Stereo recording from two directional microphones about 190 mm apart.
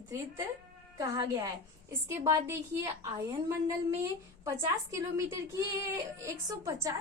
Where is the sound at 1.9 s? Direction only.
15° right (ahead or behind).